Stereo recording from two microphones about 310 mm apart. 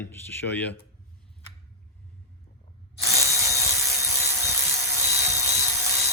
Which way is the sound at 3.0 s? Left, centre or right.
Centre.